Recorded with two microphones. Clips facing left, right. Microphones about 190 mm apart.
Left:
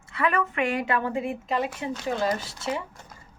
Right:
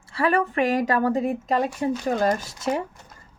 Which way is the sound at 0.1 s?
35° right (ahead or behind).